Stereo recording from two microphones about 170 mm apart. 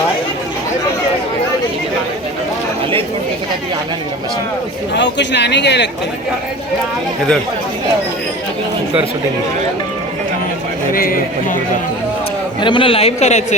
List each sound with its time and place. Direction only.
4.9 s speech: 90° left
10.9 s a man's voice: 55° left (ahead or behind)
12.5 s a man's voice: 30° left (ahead or behind)